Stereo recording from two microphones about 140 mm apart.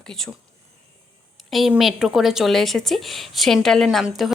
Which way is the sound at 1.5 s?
Centre (ahead or behind).